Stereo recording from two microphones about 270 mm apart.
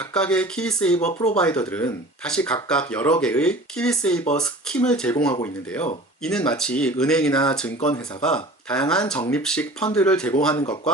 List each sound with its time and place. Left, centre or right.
0.0 s speech: centre
0.9 s speech: left
1.4 s speech: centre
4.2 s speech: centre
4.4 s speech: centre
10.5 s speech: centre